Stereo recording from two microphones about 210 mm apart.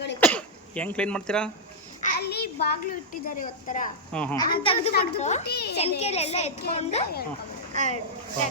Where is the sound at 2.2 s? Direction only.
50° left (ahead or behind).